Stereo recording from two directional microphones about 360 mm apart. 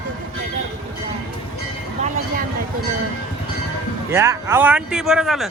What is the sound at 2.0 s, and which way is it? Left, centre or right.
Vehicle, right.